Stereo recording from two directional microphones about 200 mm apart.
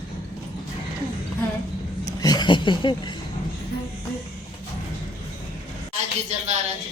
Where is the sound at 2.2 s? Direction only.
20° left (ahead or behind).